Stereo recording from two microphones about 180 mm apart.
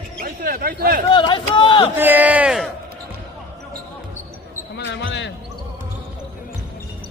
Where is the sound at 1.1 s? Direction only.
25° left (ahead or behind).